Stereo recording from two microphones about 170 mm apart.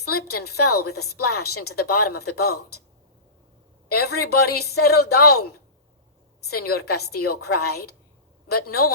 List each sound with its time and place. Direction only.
0.2 s a woman's voice: 65° left (ahead or behind)
4.0 s a woman's voice: 65° left (ahead or behind)